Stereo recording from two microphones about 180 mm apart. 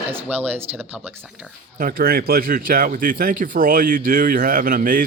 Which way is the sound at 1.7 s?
55° right (ahead or behind).